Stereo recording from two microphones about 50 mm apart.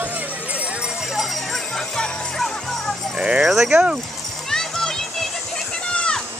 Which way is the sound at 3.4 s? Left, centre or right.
Centre.